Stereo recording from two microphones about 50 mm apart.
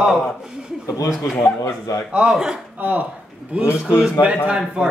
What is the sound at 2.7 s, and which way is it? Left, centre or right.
Speech, right.